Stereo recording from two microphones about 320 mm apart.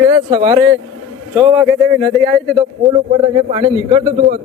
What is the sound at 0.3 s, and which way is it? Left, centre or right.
A man's voice, centre.